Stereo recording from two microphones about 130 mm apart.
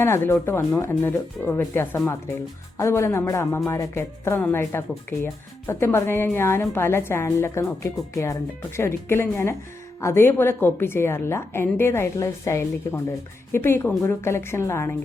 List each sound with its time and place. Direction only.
0.0 s a woman's voice: 20° left (ahead or behind)